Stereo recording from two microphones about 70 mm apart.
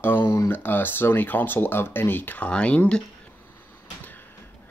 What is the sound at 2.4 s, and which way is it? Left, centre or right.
Speech, centre.